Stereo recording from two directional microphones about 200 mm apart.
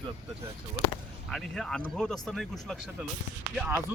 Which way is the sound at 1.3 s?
Centre (ahead or behind).